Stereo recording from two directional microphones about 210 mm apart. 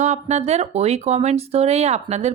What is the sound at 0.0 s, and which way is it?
A woman's voice, 30° right (ahead or behind).